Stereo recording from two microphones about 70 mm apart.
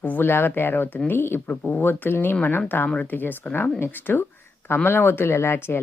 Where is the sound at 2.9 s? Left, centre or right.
Centre.